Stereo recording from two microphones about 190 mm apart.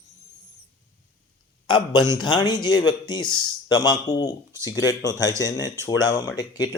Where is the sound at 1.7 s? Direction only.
20° left (ahead or behind).